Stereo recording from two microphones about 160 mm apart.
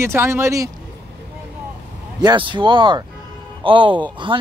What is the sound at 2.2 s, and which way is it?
Speech, 30° right (ahead or behind).